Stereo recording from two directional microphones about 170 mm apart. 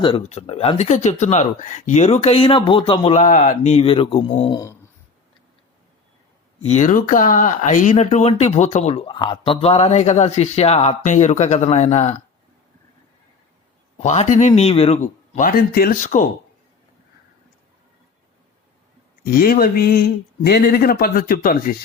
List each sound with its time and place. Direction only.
0.2 s speech: 40° left (ahead or behind)
4.5 s a sound: 15° left (ahead or behind)
6.7 s speech: 45° left (ahead or behind)
9.0 s speech: 30° left (ahead or behind)
14.0 s speech: 45° left (ahead or behind)
19.2 s speech: 60° left (ahead or behind)